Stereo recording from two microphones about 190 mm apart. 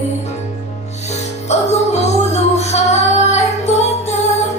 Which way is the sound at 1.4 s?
35° left (ahead or behind).